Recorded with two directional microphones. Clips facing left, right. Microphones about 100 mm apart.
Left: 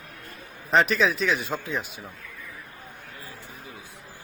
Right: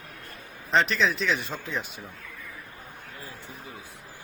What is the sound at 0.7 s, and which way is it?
Speech, 5° left (ahead or behind).